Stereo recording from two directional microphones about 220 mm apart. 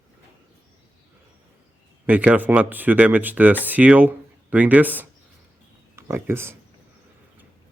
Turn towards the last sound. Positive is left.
turn(degrees=-10)  # may be behind; listen again after turning